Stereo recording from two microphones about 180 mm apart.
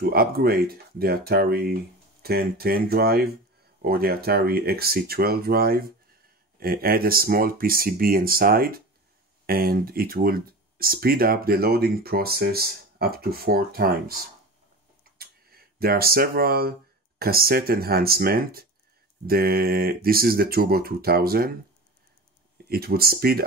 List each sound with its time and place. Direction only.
0.0 s speech: 55° right (ahead or behind)
15.1 s a sound: 55° right (ahead or behind)
17.2 s speech: 55° right (ahead or behind)
22.7 s speech: 60° right (ahead or behind)